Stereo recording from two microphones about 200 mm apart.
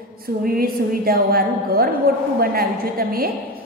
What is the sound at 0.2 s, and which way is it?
A woman's voice, 45° right (ahead or behind).